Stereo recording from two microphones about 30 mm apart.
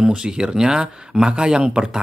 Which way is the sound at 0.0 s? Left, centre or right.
Right.